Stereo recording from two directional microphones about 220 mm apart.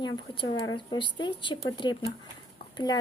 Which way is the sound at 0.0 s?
20° left (ahead or behind).